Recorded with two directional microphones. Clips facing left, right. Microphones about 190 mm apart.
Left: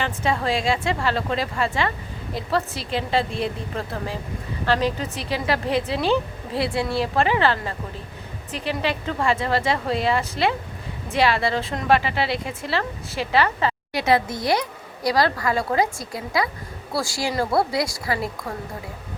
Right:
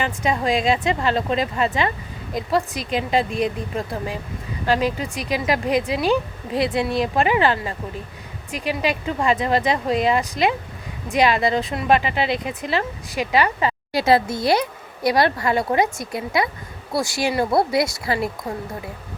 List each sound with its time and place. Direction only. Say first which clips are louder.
0.0 s a woman's voice: right 2 dB; 15° right (ahead or behind)
13.9 s a woman's voice: right 4 dB; 35° right (ahead or behind)